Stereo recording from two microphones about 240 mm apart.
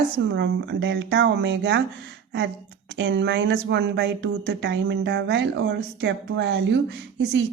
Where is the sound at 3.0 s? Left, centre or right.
Right.